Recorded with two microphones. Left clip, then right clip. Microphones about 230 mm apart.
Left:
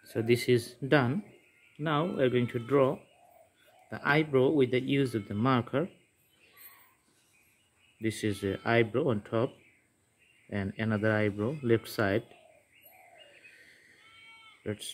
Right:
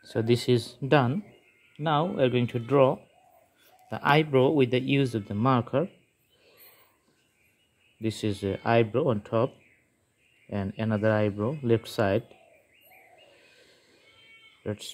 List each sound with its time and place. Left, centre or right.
0.0 s speech: centre
8.0 s speech: centre
10.5 s speech: centre
13.5 s a sound: centre
14.6 s speech: centre